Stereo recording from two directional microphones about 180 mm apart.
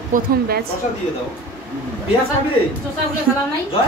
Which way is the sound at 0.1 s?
45° right (ahead or behind).